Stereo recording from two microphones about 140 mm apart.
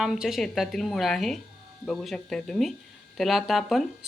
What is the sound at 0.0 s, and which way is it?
A woman's voice, centre (ahead or behind).